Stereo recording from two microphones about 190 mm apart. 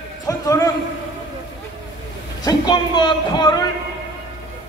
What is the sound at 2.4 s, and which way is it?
Speech, 20° left (ahead or behind).